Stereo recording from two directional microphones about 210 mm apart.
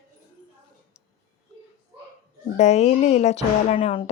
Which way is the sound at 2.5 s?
30° left (ahead or behind).